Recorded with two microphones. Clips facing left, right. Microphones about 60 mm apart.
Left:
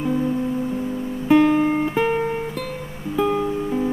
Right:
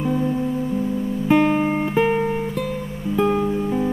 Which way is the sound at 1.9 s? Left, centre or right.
Centre.